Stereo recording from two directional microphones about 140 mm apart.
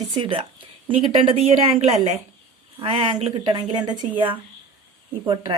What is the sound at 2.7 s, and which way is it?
Speech, 40° right (ahead or behind).